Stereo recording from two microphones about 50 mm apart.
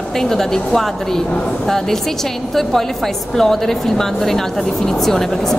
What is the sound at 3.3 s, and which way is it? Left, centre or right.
A woman's voice, centre.